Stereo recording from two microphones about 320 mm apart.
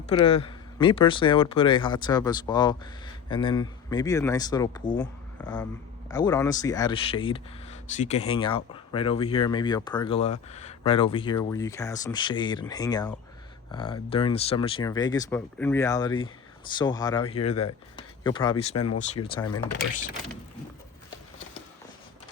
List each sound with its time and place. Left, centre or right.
0.3 s speech: centre